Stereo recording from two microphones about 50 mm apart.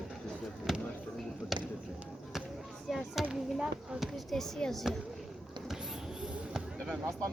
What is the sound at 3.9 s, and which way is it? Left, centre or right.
Speech, centre.